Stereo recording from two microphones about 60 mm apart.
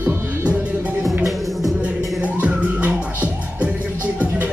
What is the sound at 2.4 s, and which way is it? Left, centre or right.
Music, right.